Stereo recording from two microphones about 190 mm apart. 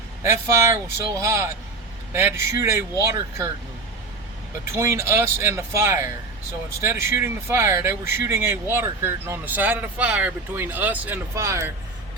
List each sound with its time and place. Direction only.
0.2 s speech: 15° right (ahead or behind)
4.6 s speech: 15° right (ahead or behind)